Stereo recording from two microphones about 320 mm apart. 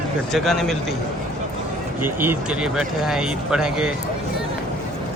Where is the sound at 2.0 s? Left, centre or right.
Centre.